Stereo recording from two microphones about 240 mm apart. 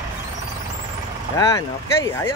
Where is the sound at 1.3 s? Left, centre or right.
Centre.